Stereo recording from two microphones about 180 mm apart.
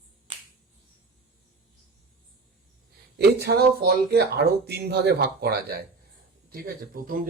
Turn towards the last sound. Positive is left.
turn(degrees=-50)  # may be behind; listen again after turning